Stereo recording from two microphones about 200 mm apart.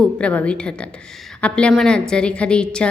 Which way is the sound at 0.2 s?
5° left (ahead or behind).